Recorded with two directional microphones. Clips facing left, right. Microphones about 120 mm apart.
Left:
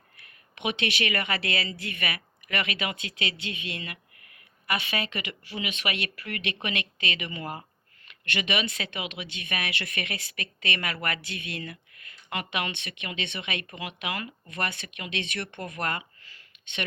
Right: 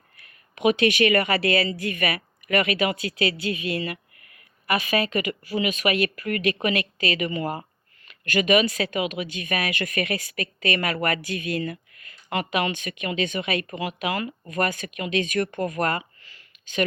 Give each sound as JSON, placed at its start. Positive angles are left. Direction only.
{"t": 0.2, "sound": "speech", "side_deg": -40}
{"t": 3.0, "sound": "speech", "side_deg": 25}
{"t": 4.7, "sound": "speech", "side_deg": -35}